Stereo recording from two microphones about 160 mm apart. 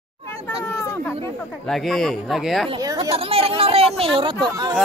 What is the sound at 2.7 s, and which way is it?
Speech, 25° right (ahead or behind).